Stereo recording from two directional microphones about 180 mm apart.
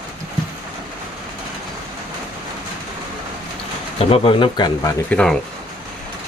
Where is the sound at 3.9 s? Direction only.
30° left (ahead or behind).